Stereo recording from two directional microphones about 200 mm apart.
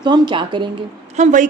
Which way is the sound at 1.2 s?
35° right (ahead or behind).